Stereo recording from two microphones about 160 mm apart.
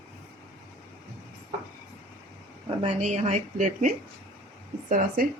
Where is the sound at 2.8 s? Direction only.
45° right (ahead or behind).